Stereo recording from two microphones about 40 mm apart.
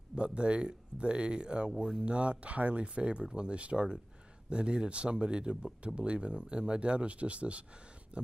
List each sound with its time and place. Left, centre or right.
0.1 s speech: right